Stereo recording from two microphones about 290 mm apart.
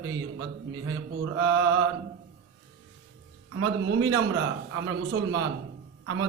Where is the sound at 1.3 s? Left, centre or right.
Right.